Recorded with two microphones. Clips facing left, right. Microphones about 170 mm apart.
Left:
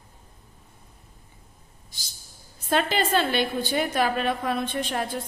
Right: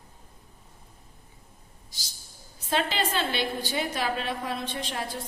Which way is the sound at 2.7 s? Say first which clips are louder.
Left 4 dB; 50° left (ahead or behind).